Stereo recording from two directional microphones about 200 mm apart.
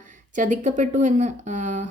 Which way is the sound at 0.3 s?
40° right (ahead or behind).